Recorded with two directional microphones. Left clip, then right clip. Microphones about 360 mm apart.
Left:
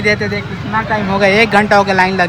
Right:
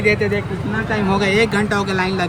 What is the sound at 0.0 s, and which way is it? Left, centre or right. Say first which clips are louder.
Speech: left 3 dB; left.